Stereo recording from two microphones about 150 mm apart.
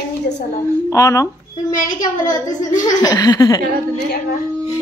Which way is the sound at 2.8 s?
25° left (ahead or behind).